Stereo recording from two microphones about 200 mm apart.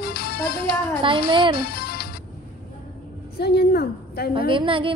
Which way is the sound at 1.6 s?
50° left (ahead or behind).